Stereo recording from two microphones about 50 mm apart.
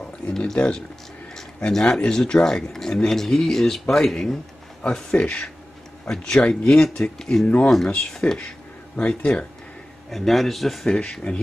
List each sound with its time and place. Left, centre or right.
0.6 s speech: left
1.3 s speech: centre
7.4 s speech: left
7.7 s speech: centre
10.1 s speech: centre
11.0 s speech: left